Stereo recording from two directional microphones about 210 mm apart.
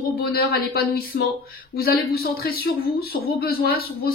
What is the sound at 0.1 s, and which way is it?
Speech, 45° left (ahead or behind).